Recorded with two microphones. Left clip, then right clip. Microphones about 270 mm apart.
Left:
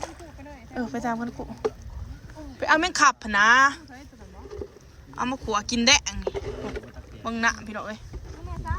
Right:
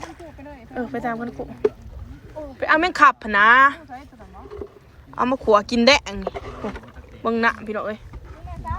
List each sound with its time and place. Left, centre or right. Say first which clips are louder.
0.5 s speech: right 3 dB; centre
2.6 s speech: right 4 dB; centre
5.1 s speech: right 10 dB; centre
7.3 s speech: right 5 dB; centre